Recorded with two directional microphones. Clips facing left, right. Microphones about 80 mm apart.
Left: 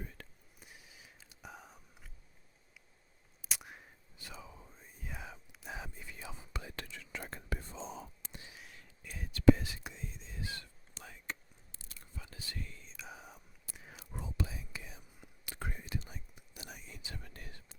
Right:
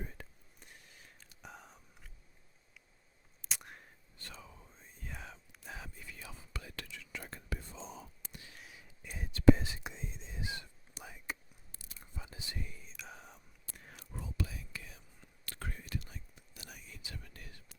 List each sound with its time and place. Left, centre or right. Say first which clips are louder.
0.2 s whispering: right 2 dB; centre
0.6 s a sound: left 1 dB; centre
3.4 s whispering: even; centre
5.6 s whispering: left 2 dB; centre
6.8 s whispering: left 2 dB; left
8.5 s a sound: even; centre
9.0 s whispering: even; centre
12.9 s whispering: left 1 dB; centre
14.0 s whispering: left 1 dB; centre